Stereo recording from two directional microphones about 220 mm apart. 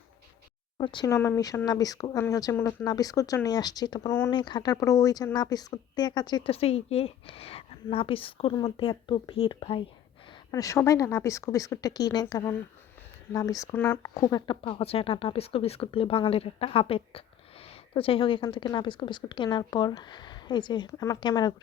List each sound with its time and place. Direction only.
0.8 s speech: 20° left (ahead or behind)